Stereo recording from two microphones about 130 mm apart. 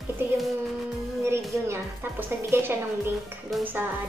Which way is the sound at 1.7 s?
15° right (ahead or behind).